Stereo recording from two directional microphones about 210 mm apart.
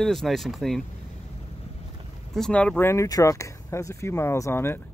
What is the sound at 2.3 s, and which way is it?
Speech, 5° left (ahead or behind).